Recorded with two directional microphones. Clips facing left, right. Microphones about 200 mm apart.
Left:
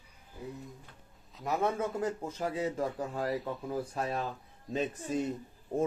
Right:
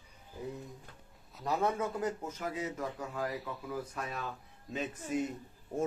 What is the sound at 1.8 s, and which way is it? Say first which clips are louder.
Speech: left 2 dB; 30° left (ahead or behind).